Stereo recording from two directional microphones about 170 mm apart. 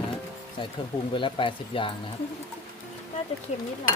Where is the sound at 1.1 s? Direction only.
30° left (ahead or behind).